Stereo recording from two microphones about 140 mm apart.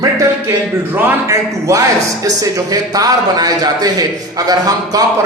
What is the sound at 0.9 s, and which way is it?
A man's voice, 15° right (ahead or behind).